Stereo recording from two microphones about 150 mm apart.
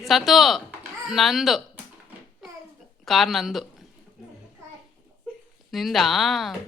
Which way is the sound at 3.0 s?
Centre (ahead or behind).